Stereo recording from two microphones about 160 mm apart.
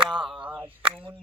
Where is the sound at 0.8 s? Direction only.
35° right (ahead or behind).